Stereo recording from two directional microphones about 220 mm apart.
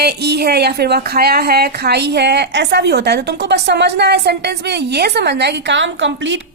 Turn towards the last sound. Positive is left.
turn(degrees=-55)  # may be behind; listen again after turning